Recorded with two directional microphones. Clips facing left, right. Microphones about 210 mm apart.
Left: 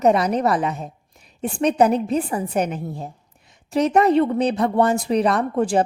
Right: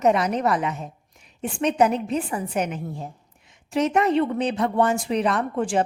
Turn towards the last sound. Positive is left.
turn(degrees=40)  # may be behind; listen again after turning